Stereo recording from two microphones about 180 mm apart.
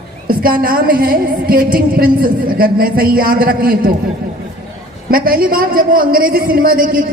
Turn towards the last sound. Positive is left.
turn(degrees=-50)  # may be behind; listen again after turning